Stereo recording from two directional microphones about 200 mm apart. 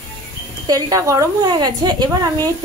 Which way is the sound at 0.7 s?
20° right (ahead or behind).